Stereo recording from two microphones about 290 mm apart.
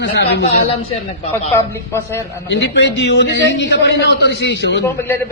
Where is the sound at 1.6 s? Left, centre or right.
Centre.